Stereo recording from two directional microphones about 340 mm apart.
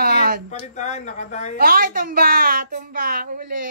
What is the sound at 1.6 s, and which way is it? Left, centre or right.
Speech, right.